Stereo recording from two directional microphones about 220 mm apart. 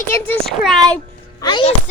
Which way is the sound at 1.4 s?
20° left (ahead or behind).